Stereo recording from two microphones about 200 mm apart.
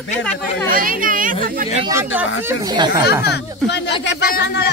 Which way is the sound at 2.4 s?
20° right (ahead or behind).